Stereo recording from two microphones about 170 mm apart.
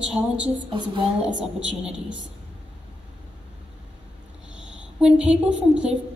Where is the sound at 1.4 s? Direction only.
5° right (ahead or behind).